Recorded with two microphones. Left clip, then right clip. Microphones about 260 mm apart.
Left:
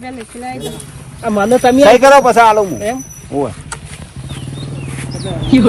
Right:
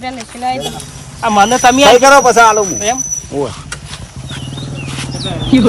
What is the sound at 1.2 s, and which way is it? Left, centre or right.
Speech, centre.